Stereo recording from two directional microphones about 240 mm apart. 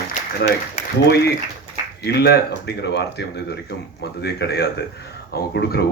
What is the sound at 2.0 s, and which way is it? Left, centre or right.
Speech, left.